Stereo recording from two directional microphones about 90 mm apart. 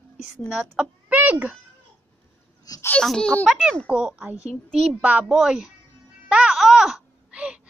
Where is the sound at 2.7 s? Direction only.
45° left (ahead or behind).